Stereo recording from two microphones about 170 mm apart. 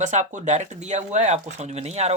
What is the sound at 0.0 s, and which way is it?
Speech, 45° right (ahead or behind).